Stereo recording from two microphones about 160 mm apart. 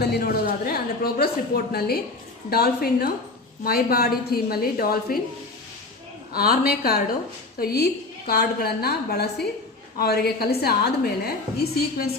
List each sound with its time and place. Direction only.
0.0 s a woman's voice: 80° left
6.3 s a woman's voice: 70° left (ahead or behind)